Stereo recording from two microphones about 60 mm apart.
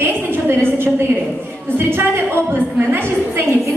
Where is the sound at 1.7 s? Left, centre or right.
Right.